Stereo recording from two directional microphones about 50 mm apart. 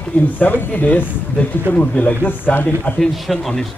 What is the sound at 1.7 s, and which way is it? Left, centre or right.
A man's voice, left.